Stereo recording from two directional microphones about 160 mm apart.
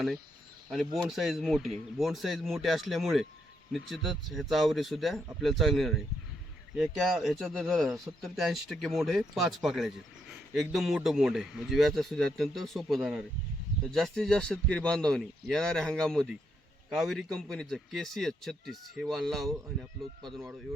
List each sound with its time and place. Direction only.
0.7 s speech: centre (ahead or behind)